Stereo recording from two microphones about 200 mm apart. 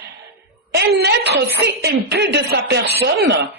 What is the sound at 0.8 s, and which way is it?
A woman's voice, 55° right (ahead or behind).